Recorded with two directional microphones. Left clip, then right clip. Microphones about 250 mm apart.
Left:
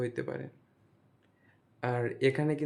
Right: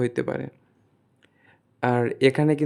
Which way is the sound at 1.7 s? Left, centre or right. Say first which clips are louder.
Right 10 dB; right.